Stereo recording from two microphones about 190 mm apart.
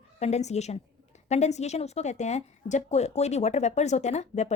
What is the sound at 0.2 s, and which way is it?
Speech, 35° left (ahead or behind).